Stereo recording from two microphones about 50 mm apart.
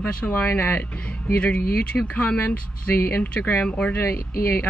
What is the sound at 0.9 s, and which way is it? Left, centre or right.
Speech, left.